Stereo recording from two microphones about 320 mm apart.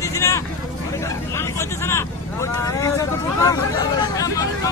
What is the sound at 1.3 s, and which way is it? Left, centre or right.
Vehicle, centre.